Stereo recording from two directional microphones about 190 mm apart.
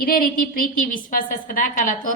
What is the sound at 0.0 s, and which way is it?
A woman's voice, 50° left (ahead or behind).